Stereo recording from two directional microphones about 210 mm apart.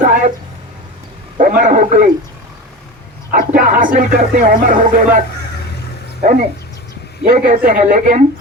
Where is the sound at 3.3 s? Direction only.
40° right (ahead or behind).